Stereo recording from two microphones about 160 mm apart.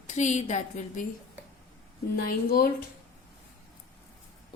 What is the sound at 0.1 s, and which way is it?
Speech, 50° left (ahead or behind).